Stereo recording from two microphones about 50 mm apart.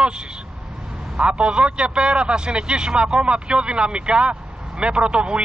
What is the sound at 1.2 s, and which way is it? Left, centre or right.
A man's voice, centre.